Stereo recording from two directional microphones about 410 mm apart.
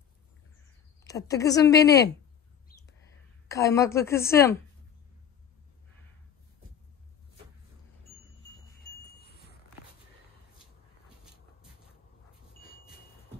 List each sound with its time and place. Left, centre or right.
1.0 s a woman's voice: centre
2.7 s whispering: left
3.4 s a woman's voice: centre
9.1 s a sound: left